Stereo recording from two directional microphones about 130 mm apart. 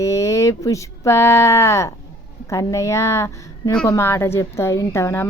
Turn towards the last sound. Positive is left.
turn(degrees=20)  # may be behind; listen again after turning